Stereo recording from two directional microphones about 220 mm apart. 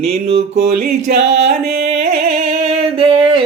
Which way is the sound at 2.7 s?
25° right (ahead or behind).